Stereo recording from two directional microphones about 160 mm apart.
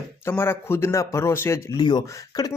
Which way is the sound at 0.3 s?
15° left (ahead or behind).